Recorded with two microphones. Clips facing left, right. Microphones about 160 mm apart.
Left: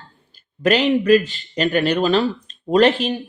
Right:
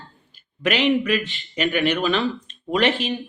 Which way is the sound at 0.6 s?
40° left (ahead or behind).